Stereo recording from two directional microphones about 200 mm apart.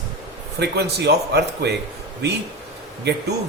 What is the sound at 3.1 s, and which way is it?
Speech, 60° right (ahead or behind).